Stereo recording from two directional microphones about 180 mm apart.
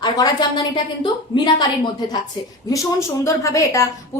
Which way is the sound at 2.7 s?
15° left (ahead or behind).